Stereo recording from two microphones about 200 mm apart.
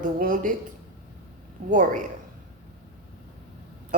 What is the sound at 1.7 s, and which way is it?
Speech, 40° right (ahead or behind).